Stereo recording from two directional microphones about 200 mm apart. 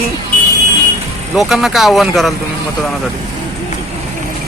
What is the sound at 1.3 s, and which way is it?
Speech, centre (ahead or behind).